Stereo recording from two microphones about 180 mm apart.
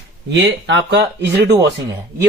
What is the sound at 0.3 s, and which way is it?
Speech, 80° right.